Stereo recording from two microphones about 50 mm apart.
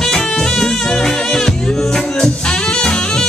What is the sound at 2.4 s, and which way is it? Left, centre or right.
Saxophone, centre.